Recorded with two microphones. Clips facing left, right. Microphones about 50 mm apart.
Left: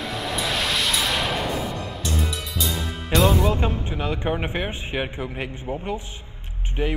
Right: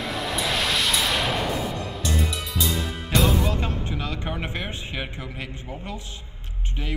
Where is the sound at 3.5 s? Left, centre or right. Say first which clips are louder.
Left 3 dB; left.